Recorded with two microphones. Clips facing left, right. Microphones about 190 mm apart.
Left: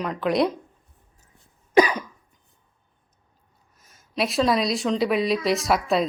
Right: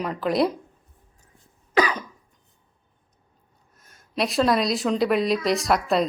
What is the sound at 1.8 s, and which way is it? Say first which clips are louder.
Cough: left 4 dB; 10° left (ahead or behind).